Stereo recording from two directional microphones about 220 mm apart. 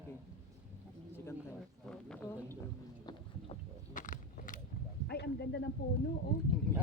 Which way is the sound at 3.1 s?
20° left (ahead or behind).